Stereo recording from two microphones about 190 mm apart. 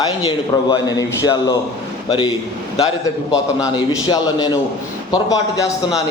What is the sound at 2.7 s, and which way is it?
Speech, 30° left (ahead or behind).